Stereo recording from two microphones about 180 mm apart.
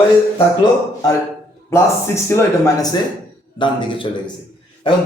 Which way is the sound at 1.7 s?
15° left (ahead or behind).